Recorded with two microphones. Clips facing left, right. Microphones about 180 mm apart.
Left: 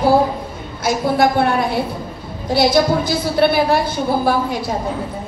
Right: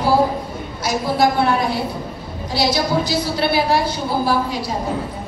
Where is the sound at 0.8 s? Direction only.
55° left (ahead or behind).